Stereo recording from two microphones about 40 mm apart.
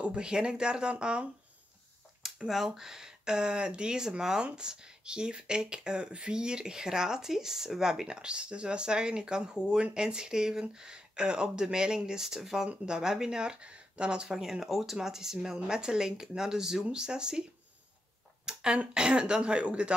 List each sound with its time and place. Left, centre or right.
0.0 s speech: right
2.4 s speech: centre
8.2 s speech: right
18.4 s a sound: right
18.9 s speech: right